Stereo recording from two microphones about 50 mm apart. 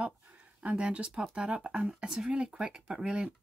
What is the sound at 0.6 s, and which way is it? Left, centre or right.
Speech, right.